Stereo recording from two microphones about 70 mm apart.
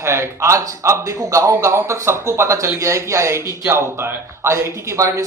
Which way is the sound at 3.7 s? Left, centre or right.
Right.